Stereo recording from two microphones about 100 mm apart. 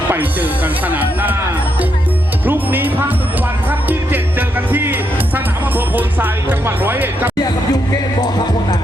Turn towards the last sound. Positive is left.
turn(degrees=-20)  # may be behind; listen again after turning